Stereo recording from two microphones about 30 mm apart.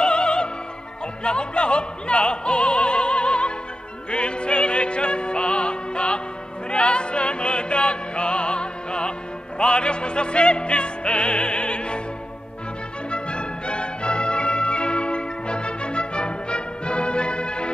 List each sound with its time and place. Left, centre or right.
0.0 s music: left
1.2 s opera: left
4.1 s music: left
13.1 s music: left